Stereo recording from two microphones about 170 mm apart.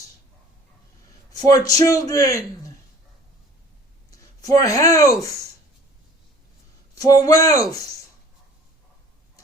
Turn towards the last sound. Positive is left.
turn(degrees=20)  # may be behind; listen again after turning